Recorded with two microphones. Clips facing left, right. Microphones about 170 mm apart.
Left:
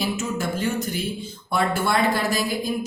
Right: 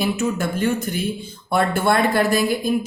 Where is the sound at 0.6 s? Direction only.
55° right (ahead or behind).